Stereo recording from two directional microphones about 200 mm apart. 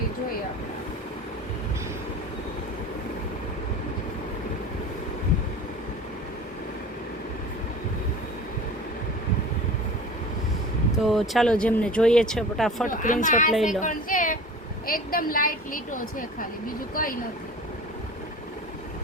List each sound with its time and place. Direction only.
10.9 s speech: centre (ahead or behind)
12.9 s a woman's voice: 40° left (ahead or behind)